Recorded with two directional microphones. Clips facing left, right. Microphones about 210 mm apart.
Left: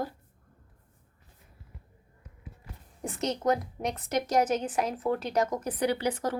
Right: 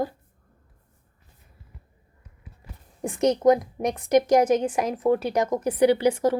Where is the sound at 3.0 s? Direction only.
15° right (ahead or behind).